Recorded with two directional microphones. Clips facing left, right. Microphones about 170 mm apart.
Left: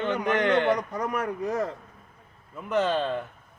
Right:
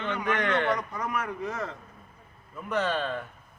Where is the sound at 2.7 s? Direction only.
25° left (ahead or behind).